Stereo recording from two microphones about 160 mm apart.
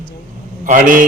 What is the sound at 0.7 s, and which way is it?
Speech, 55° right (ahead or behind).